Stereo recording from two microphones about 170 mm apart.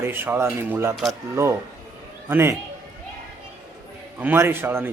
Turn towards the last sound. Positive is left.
turn(degrees=-10)  # may be behind; listen again after turning